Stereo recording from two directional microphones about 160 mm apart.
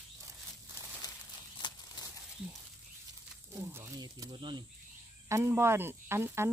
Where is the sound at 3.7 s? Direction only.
20° right (ahead or behind).